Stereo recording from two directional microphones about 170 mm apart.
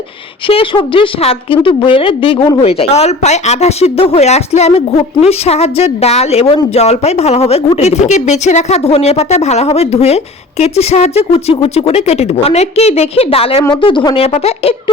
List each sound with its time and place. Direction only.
0.4 s a woman's voice: 30° left (ahead or behind)